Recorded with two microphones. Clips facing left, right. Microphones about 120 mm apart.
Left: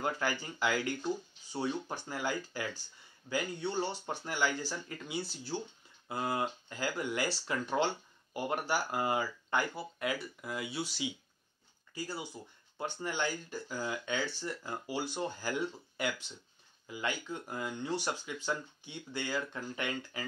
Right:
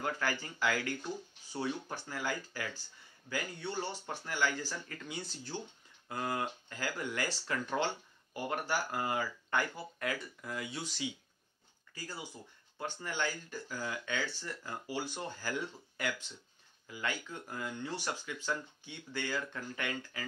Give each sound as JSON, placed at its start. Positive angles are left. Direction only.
{"t": 0.0, "sound": "speech", "side_deg": 15}